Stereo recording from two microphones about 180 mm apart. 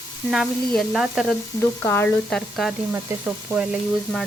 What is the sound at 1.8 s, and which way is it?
Speech, 10° left (ahead or behind).